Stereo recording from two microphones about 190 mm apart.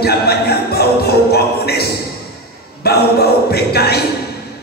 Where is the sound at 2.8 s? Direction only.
55° left (ahead or behind).